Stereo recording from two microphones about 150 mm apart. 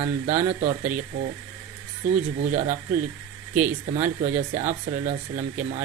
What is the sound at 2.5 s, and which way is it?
Speech, 55° right (ahead or behind).